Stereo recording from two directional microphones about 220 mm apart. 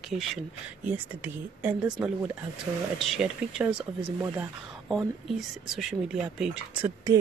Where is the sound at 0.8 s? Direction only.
10° right (ahead or behind).